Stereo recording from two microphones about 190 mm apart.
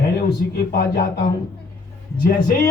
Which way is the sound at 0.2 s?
55° left (ahead or behind).